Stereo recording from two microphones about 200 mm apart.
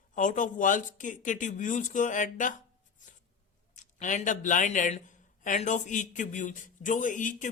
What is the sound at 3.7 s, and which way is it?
Speech, 40° left (ahead or behind).